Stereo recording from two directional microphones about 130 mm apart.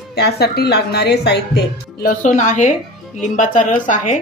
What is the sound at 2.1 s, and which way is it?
Speech, 80° left.